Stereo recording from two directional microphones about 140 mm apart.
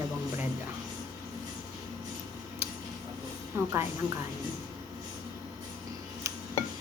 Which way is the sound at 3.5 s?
20° right (ahead or behind).